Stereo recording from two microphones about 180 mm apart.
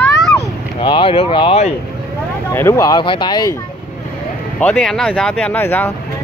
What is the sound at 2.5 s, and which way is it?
Speech, 15° left (ahead or behind).